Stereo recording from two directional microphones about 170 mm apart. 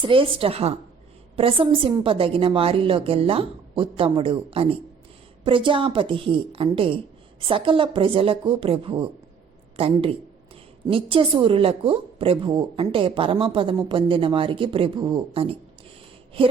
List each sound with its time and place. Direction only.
0.0 s a woman's voice: 30° right (ahead or behind)